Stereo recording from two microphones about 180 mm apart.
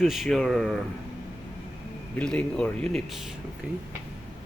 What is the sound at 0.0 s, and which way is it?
Speech, centre (ahead or behind).